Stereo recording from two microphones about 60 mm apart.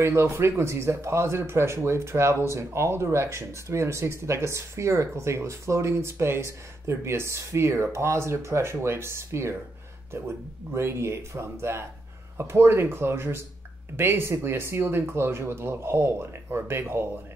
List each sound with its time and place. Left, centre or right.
0.0 s speech: right